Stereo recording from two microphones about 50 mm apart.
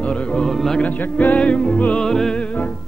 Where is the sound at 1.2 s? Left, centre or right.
Left.